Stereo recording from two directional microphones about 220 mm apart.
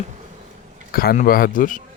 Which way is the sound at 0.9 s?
40° left (ahead or behind).